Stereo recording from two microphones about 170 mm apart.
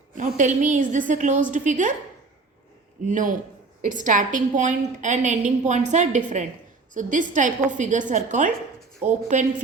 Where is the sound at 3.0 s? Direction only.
50° right (ahead or behind).